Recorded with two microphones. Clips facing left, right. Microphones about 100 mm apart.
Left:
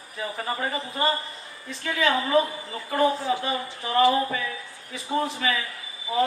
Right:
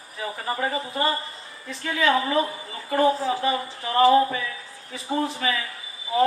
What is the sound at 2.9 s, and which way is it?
A man's voice, 35° right (ahead or behind).